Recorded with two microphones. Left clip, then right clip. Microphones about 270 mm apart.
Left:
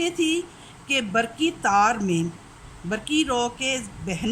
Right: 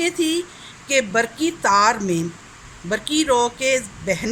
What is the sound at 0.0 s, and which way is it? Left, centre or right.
Speech, centre.